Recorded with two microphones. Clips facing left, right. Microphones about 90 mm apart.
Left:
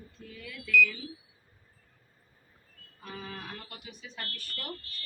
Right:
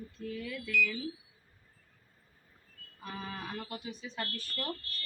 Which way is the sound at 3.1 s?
10° right (ahead or behind).